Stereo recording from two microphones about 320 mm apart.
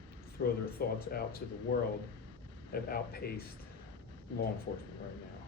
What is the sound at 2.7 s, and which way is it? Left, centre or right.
Speech, left.